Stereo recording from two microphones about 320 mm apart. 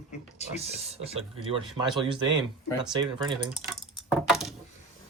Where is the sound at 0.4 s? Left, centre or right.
Centre.